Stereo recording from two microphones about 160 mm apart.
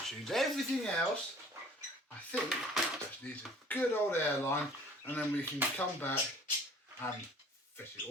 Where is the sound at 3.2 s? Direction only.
10° left (ahead or behind).